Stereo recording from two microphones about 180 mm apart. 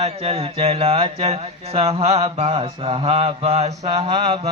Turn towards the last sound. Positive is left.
turn(degrees=-35)  # may be behind; listen again after turning